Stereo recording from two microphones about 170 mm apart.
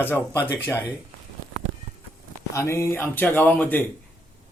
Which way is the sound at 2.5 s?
15° left (ahead or behind).